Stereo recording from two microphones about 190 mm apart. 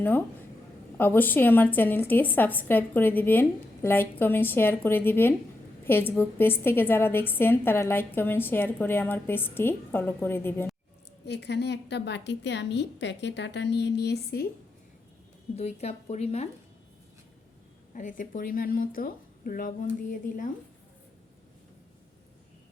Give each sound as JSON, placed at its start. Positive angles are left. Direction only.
{"t": 0.9, "sound": "a woman's voice", "side_deg": 10}
{"t": 11.3, "sound": "a woman's voice", "side_deg": 60}
{"t": 15.5, "sound": "speech", "side_deg": 35}
{"t": 17.9, "sound": "speech", "side_deg": 45}